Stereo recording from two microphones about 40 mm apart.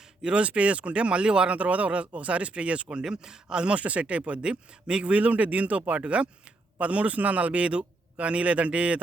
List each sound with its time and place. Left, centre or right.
0.2 s speech: right
3.0 s speech: centre
5.1 s speech: right